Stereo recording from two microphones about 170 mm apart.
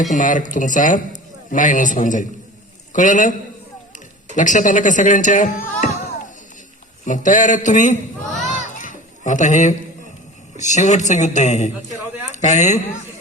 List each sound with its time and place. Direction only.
0.0 s a man's voice: 50° left (ahead or behind)
4.4 s speech: 50° left (ahead or behind)
8.4 s a sound: 50° left (ahead or behind)
10.6 s speech: 45° left (ahead or behind)